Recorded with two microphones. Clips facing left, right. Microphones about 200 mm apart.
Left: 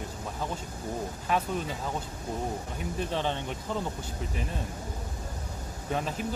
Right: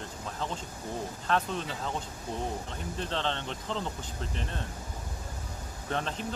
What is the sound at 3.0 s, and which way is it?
Speech, 10° left (ahead or behind).